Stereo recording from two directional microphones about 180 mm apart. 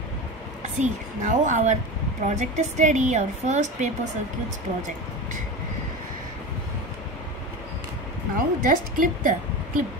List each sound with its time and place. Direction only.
0.6 s a woman's voice: 40° right (ahead or behind)
8.4 s a woman's voice: 50° right (ahead or behind)